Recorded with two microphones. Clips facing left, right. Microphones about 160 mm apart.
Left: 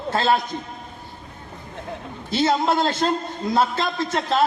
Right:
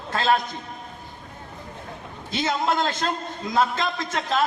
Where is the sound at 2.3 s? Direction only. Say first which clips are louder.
Left 4 dB; 35° left (ahead or behind).